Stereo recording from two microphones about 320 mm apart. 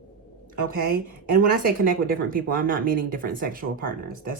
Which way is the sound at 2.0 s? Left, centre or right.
Right.